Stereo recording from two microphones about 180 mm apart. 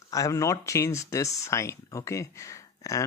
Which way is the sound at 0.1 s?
20° left (ahead or behind).